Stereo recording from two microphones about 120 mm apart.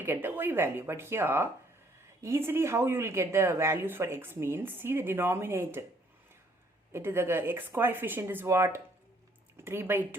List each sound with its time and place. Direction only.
0.0 s speech: 20° right (ahead or behind)
6.9 s speech: 20° right (ahead or behind)